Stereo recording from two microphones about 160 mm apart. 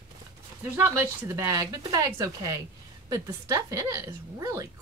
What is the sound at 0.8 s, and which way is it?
Speech, 15° right (ahead or behind).